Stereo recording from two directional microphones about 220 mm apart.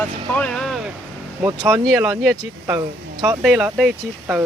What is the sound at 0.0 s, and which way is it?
Speech, 5° left (ahead or behind).